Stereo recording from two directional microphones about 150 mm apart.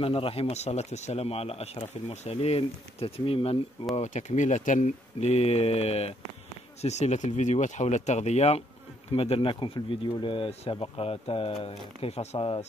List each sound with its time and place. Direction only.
0.0 s speech: 40° left (ahead or behind)
3.9 s speech: 50° left (ahead or behind)